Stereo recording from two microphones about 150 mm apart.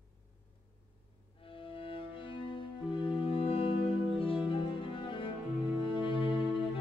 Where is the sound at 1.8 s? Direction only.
35° left (ahead or behind).